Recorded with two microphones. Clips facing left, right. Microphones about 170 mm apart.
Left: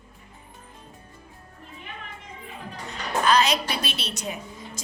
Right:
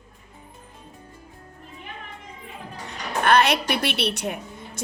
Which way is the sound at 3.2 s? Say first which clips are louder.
Right 3 dB; 60° right (ahead or behind).